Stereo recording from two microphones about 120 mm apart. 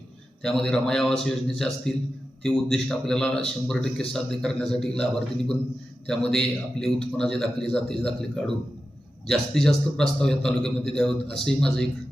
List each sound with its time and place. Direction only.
0.4 s a man's voice: 5° left (ahead or behind)